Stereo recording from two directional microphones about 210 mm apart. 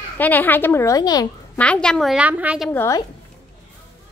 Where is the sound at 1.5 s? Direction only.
5° left (ahead or behind).